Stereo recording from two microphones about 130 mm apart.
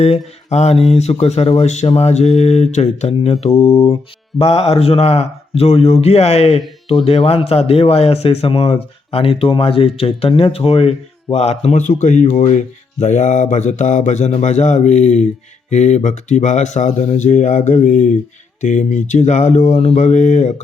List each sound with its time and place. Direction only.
0.0 s speech: 55° left (ahead or behind)
4.4 s speech: 50° left (ahead or behind)